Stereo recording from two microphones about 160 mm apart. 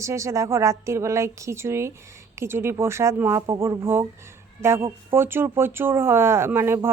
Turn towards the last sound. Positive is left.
turn(degrees=-15)  # may be behind; listen again after turning